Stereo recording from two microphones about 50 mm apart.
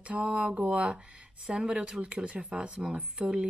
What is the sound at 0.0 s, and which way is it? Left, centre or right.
Speech, right.